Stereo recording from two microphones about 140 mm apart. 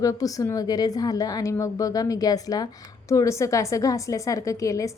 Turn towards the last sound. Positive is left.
turn(degrees=25)  # may be behind; listen again after turning